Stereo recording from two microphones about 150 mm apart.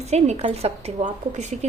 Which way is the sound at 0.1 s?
45° right (ahead or behind).